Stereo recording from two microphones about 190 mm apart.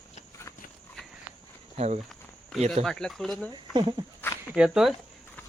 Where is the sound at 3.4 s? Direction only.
25° right (ahead or behind).